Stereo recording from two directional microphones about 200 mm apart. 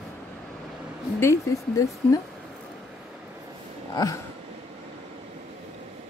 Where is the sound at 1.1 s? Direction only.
15° left (ahead or behind).